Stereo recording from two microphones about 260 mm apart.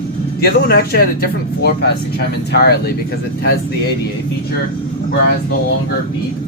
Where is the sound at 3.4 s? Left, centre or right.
Left.